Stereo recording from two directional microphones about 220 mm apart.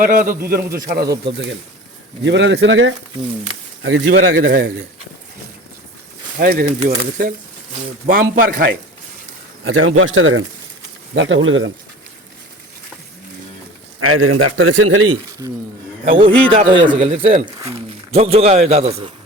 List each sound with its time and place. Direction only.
0.0 s a man's voice: 40° right (ahead or behind)
1.0 s speech: 15° right (ahead or behind)
2.2 s speech: 55° right (ahead or behind)
6.4 s a man's voice: 40° right (ahead or behind)
9.6 s speech: 65° right (ahead or behind)
14.0 s a man's voice: 75° right (ahead or behind)
15.4 s a man's voice: 20° right (ahead or behind)